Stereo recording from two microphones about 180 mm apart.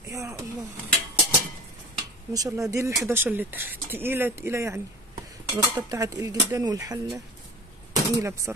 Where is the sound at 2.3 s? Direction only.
20° right (ahead or behind).